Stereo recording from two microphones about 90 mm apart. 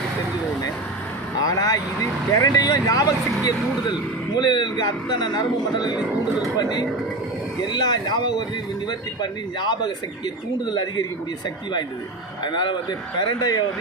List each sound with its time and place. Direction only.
1.4 s vehicle: 40° left (ahead or behind)
2.3 s speech: 45° left (ahead or behind)
12.5 s speech: 55° left (ahead or behind)